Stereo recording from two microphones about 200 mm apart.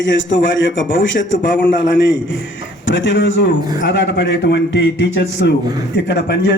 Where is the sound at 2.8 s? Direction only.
65° left (ahead or behind).